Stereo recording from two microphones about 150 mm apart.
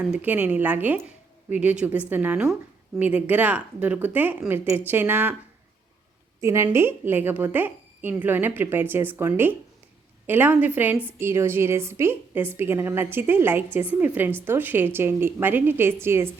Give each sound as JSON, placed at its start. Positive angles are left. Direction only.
{"t": 0.0, "sound": "speech", "side_deg": -10}
{"t": 6.4, "sound": "speech", "side_deg": -15}